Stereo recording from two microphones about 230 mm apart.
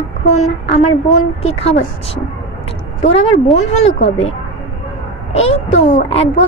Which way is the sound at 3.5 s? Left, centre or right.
Left.